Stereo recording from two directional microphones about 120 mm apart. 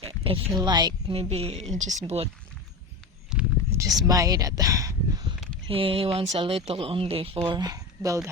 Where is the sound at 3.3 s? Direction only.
5° right (ahead or behind).